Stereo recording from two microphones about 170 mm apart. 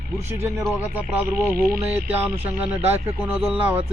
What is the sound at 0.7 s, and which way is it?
Speech, 10° right (ahead or behind).